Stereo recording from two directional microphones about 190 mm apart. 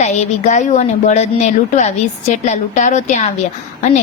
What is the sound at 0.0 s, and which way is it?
A woman's voice, 40° left (ahead or behind).